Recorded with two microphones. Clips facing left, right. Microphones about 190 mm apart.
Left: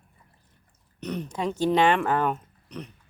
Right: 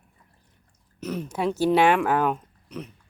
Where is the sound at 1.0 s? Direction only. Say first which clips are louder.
Right 2 dB; centre (ahead or behind).